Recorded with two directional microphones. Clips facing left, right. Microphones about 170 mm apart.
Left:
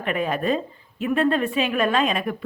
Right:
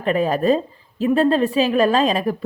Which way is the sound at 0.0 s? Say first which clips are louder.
Right 6 dB; 35° right (ahead or behind).